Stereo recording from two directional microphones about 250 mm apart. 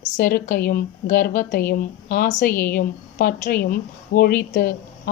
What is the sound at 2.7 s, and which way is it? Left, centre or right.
Speech, left.